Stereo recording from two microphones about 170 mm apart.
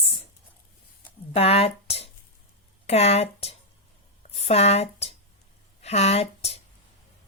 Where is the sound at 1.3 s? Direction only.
35° left (ahead or behind).